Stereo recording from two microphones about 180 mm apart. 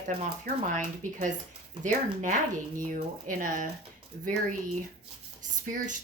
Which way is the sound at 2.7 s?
50° right (ahead or behind).